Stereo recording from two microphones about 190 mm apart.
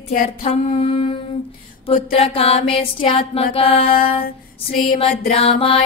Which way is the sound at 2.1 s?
30° left (ahead or behind).